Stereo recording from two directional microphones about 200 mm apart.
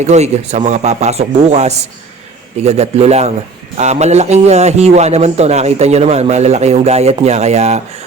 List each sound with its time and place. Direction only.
0.0 s a man's voice: 35° right (ahead or behind)